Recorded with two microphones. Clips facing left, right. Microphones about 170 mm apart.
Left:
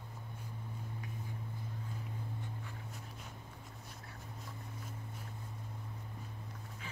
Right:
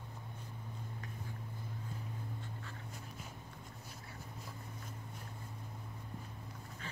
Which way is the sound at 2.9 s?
Centre (ahead or behind).